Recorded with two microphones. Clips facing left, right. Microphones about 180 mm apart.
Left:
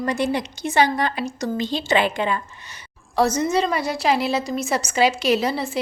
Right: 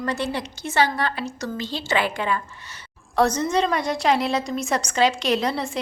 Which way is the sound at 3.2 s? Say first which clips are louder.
Left 1 dB; 5° left (ahead or behind).